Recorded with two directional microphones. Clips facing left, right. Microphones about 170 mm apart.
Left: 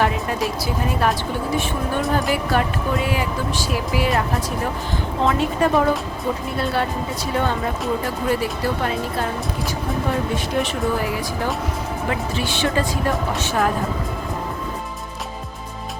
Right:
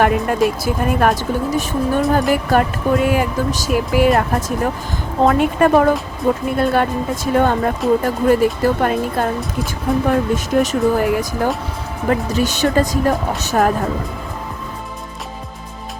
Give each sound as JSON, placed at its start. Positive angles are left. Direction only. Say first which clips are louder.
{"t": 0.0, "sound": "speech", "louder": "right 6 dB", "side_deg": -55}